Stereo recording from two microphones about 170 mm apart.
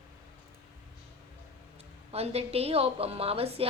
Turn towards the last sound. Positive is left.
turn(degrees=-35)  # may be behind; listen again after turning